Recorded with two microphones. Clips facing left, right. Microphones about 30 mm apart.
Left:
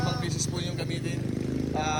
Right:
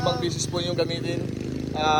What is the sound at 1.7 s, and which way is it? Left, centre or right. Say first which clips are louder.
Speech: right 9 dB; right.